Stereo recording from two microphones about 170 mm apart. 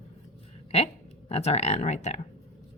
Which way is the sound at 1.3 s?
40° left (ahead or behind).